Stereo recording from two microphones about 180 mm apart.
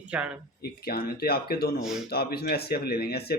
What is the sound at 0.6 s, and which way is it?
A man's voice, 60° left (ahead or behind).